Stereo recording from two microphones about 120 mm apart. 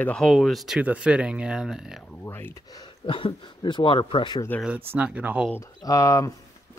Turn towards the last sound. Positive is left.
turn(degrees=25)  # may be behind; listen again after turning